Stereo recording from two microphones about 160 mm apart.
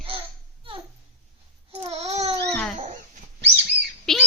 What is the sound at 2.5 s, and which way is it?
Dog, 5° left (ahead or behind).